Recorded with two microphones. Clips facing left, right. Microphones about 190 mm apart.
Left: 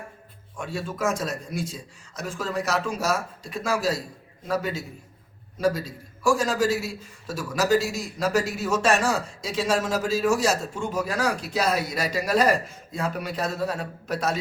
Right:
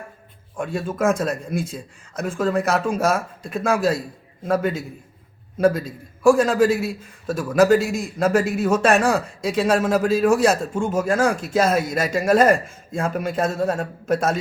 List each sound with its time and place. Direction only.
0.5 s a man's voice: 50° right (ahead or behind)